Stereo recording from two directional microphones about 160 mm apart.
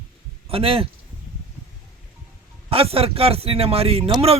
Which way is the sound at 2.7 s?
35° right (ahead or behind).